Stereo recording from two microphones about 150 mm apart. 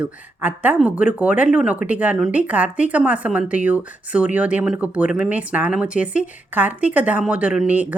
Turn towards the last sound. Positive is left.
turn(degrees=-10)  # may be behind; listen again after turning